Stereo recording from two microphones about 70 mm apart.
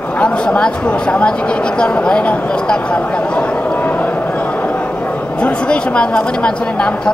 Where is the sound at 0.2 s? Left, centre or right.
Centre.